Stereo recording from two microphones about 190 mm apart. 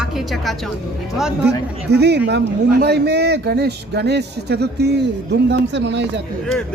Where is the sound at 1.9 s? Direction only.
60° right (ahead or behind).